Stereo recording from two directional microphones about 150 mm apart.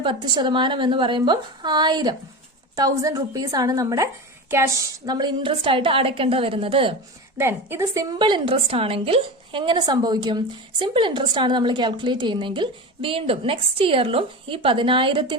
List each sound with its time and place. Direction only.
0.0 s a woman's voice: 30° right (ahead or behind)
7.3 s a woman's voice: 15° right (ahead or behind)
8.2 s a woman's voice: 35° right (ahead or behind)